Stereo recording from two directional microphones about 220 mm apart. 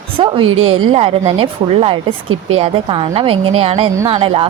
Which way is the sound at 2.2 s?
70° right (ahead or behind).